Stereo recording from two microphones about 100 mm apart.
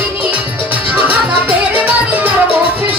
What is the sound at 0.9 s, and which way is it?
Music, 15° right (ahead or behind).